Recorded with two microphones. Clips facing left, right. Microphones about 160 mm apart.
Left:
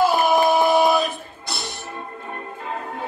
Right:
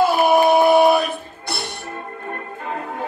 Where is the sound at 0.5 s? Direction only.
60° right (ahead or behind).